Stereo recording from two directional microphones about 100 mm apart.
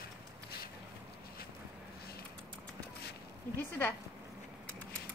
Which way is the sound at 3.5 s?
25° left (ahead or behind).